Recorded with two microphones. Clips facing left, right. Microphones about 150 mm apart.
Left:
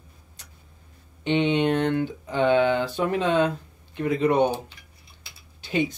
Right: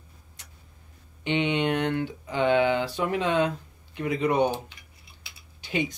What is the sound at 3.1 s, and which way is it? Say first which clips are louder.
Speech: left 3 dB; 15° right (ahead or behind).